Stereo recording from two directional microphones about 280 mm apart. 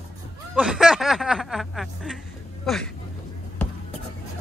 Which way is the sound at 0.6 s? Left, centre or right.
Centre.